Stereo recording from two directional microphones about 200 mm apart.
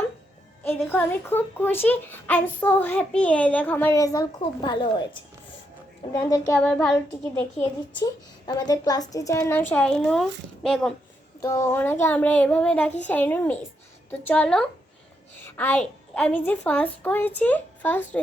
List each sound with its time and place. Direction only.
0.6 s a woman's voice: 10° left (ahead or behind)
6.1 s a woman's voice: 15° left (ahead or behind)
6.6 s child singing: 5° left (ahead or behind)
7.6 s a woman's voice: 20° left (ahead or behind); by 10.2 s 5° left (ahead or behind)
10.6 s child singing: 5° left (ahead or behind)
11.3 s a woman's voice: 15° left (ahead or behind)
14.1 s child singing: 10° left (ahead or behind)
15.4 s a woman's voice: 10° left (ahead or behind)